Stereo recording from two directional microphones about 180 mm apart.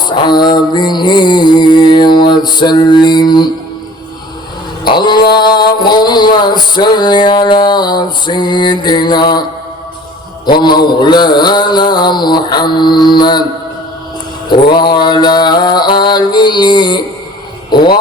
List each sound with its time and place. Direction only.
0.0 s mantra: 25° left (ahead or behind)
4.9 s mantra: 25° left (ahead or behind)
10.6 s mantra: 25° left (ahead or behind)
14.5 s mantra: 25° left (ahead or behind)
17.7 s a sound: 25° left (ahead or behind)